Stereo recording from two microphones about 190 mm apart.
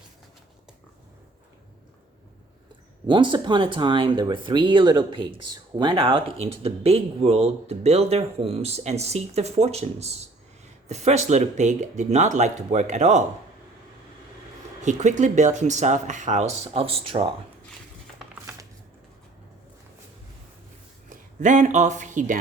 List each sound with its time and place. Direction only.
3.1 s speech: 25° right (ahead or behind)
14.8 s speech: 40° right (ahead or behind)
21.1 s speech: 40° right (ahead or behind)